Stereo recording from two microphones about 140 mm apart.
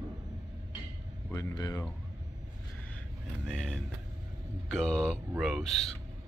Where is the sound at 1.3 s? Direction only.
25° left (ahead or behind).